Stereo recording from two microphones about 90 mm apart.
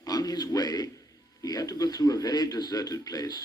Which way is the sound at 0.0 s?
45° left (ahead or behind).